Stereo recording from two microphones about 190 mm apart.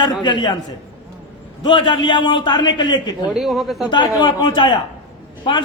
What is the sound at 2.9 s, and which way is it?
Speech, 25° left (ahead or behind).